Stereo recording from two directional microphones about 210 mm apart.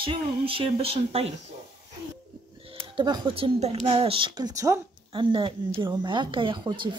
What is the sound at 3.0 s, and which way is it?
A woman's voice, 25° right (ahead or behind).